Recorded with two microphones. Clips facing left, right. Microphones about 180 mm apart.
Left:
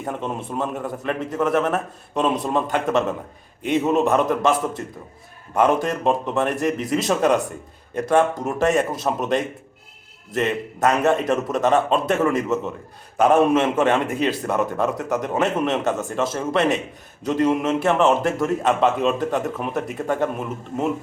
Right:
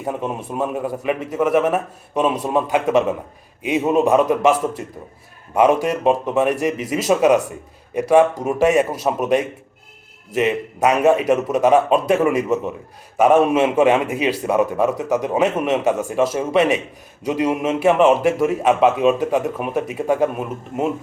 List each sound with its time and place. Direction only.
0.0 s a man's voice: 10° right (ahead or behind)
5.5 s a man's voice: 10° right (ahead or behind)